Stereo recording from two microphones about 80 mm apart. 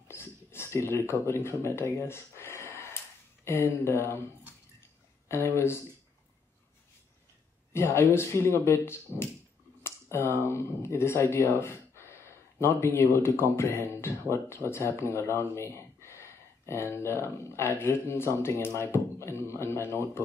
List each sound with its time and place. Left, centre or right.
0.1 s a sound: left
3.4 s a man's voice: left
5.3 s a man's voice: left
7.7 s a man's voice: left